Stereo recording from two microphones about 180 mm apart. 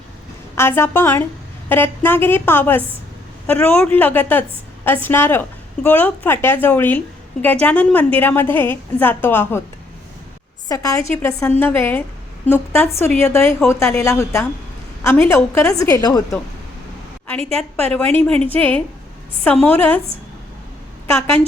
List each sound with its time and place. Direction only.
0.5 s a woman's voice: 15° left (ahead or behind)
10.7 s a woman's voice: 20° left (ahead or behind)
17.2 s a woman's voice: 5° left (ahead or behind)
21.1 s a woman's voice: 15° left (ahead or behind)